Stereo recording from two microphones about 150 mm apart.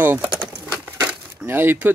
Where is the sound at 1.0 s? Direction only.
15° right (ahead or behind).